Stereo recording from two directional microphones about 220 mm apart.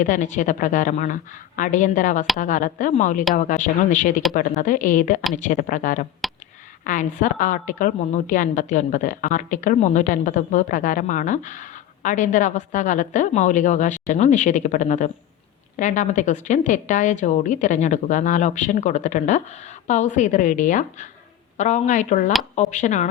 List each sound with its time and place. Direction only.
0.0 s a woman's voice: 35° left (ahead or behind)